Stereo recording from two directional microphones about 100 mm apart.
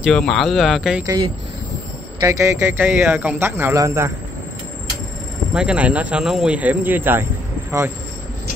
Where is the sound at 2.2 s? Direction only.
30° right (ahead or behind).